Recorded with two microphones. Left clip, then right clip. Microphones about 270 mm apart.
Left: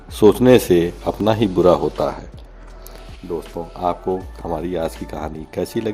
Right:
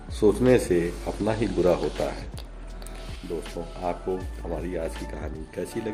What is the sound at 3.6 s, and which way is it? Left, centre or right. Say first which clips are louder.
Speech: left 11 dB; left.